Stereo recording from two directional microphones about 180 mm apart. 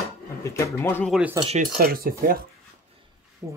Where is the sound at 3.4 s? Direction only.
15° right (ahead or behind).